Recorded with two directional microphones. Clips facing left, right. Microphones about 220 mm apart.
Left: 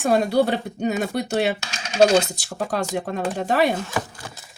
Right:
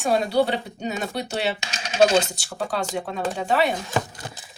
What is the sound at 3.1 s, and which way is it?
Speech, 50° left (ahead or behind).